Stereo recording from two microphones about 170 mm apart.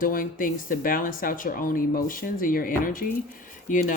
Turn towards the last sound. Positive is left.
turn(degrees=50)  # may be behind; listen again after turning